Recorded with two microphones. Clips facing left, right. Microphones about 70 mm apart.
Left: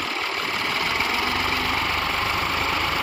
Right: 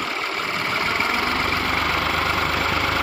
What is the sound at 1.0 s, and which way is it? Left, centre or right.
Vehicle, right.